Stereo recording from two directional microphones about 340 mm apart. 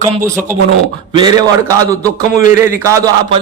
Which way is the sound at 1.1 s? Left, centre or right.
Centre.